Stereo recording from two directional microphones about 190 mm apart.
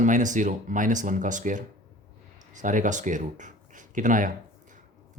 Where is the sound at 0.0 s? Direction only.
40° right (ahead or behind).